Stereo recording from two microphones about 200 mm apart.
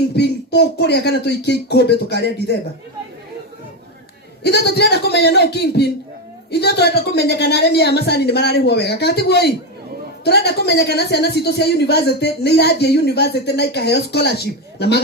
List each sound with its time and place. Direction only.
0.2 s speech: 55° left (ahead or behind)
4.4 s speech: 55° left (ahead or behind)